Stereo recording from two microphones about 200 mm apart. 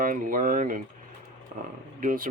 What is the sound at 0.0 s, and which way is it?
Speech, 45° right (ahead or behind).